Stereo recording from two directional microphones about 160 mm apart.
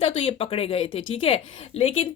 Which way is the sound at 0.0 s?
35° left (ahead or behind).